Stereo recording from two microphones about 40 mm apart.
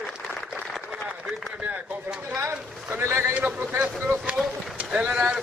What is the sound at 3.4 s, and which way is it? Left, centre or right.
Speech, right.